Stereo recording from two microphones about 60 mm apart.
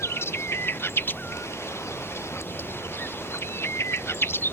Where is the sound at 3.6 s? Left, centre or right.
Left.